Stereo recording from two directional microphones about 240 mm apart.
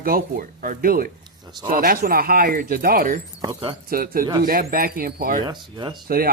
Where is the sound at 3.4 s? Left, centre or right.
Centre.